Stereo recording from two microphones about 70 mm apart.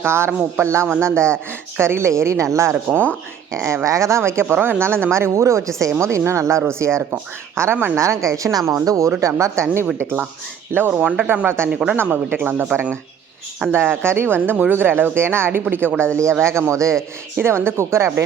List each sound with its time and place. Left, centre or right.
0.0 s a woman's voice: right
1.1 s speech: centre
1.8 s a woman's voice: right
7.9 s speech: right
8.7 s speech: right
10.0 s a woman's voice: right
10.9 s speech: centre
11.4 s a woman's voice: right
11.7 s speech: centre
12.1 s a woman's voice: right
13.7 s a woman's voice: right
17.4 s a woman's voice: right